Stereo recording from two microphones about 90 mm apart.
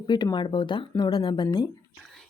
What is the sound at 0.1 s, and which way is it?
Speech, 55° left (ahead or behind).